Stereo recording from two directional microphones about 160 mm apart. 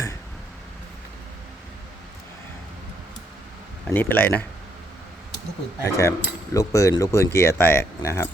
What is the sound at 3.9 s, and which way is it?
Speech, 10° left (ahead or behind).